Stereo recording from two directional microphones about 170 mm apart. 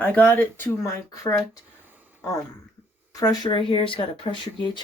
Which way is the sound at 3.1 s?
20° left (ahead or behind).